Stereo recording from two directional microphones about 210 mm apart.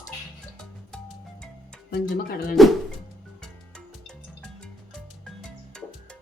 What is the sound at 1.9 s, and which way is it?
Speech, 45° left (ahead or behind).